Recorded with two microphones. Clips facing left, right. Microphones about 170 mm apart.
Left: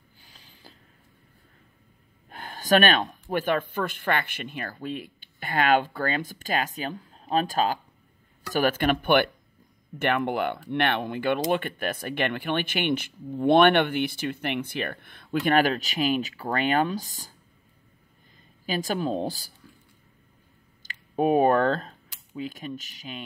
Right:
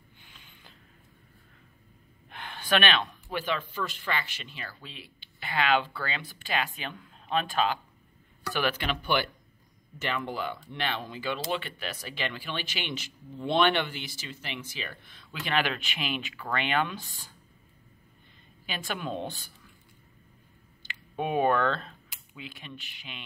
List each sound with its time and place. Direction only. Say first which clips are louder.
0.2 s a sound: left 4 dB; 35° left (ahead or behind)
2.2 s speech: left 7 dB; 40° left (ahead or behind)
18.7 s speech: left 7 dB; 40° left (ahead or behind)
20.8 s speech: left 8 dB; 40° left (ahead or behind)